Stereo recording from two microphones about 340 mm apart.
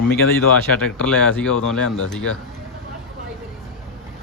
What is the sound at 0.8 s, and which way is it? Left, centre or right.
Speech, centre.